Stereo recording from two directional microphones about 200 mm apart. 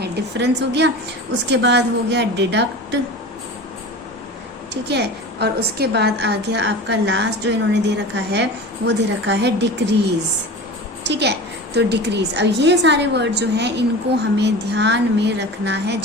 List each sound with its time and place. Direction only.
0.0 s a woman's voice: 60° right (ahead or behind)
4.7 s a woman's voice: 60° right (ahead or behind)
11.0 s a woman's voice: 60° right (ahead or behind)